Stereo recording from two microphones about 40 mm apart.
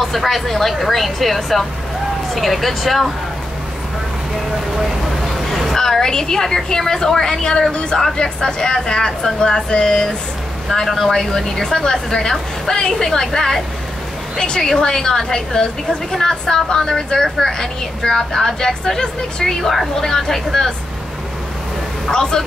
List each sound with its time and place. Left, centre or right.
0.0 s speech: centre
5.4 s vehicle: centre
5.8 s a woman's voice: centre
22.0 s speech: centre